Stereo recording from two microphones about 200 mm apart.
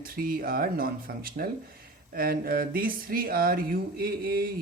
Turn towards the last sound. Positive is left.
turn(degrees=-50)  # may be behind; listen again after turning